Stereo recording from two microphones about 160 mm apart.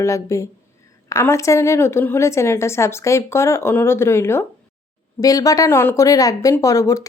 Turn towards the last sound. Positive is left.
turn(degrees=20)  # may be behind; listen again after turning